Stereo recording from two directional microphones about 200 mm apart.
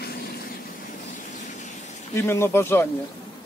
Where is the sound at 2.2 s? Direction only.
15° left (ahead or behind).